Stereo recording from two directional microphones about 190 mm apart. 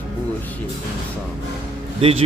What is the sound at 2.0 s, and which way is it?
Speech, 30° right (ahead or behind).